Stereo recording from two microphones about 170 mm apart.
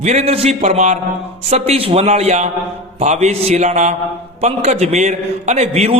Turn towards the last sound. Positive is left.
turn(degrees=-40)  # may be behind; listen again after turning